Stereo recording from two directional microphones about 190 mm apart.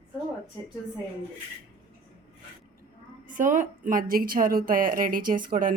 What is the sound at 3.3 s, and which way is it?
A woman's voice, 45° right (ahead or behind).